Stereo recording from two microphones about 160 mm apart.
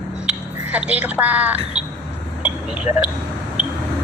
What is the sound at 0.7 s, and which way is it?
Speech, 10° right (ahead or behind).